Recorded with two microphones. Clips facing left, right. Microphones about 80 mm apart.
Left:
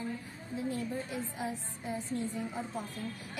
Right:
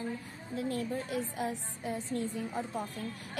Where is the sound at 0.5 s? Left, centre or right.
Right.